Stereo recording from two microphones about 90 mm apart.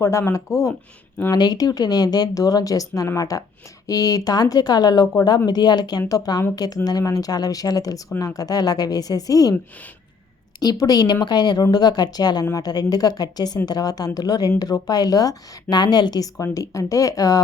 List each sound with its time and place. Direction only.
0.0 s speech: 30° left (ahead or behind)
1.3 s a woman's voice: 45° left (ahead or behind)
10.6 s a woman's voice: 45° left (ahead or behind)